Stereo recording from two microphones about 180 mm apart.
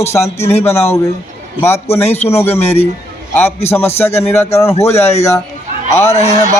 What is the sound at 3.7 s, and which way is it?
Speech, 15° left (ahead or behind).